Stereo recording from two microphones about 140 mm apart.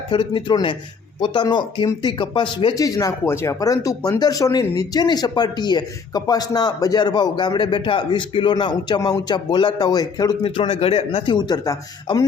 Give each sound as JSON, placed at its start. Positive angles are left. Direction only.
{"t": 0.1, "sound": "speech", "side_deg": 35}
{"t": 2.7, "sound": "speech", "side_deg": 25}
{"t": 10.4, "sound": "speech", "side_deg": 40}
{"t": 11.3, "sound": "speech", "side_deg": 30}